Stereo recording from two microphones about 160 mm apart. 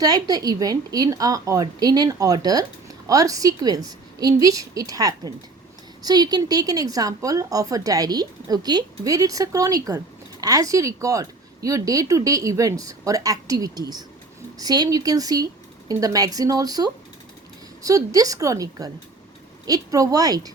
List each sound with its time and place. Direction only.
0.0 s a woman's voice: 25° right (ahead or behind)